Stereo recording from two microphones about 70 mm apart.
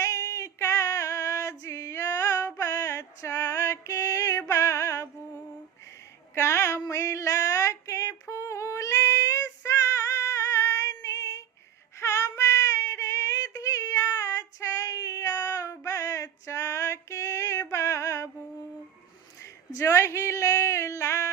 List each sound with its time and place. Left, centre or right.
0.0 s female singing: left
2.6 s music: left
6.3 s a sound: left
11.9 s child singing: left
19.4 s female singing: left